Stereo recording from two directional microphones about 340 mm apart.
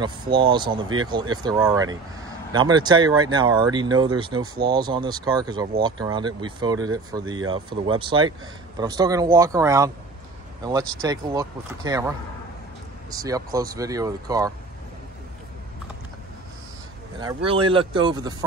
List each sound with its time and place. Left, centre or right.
0.0 s speech: centre
13.1 s speech: centre
17.2 s speech: centre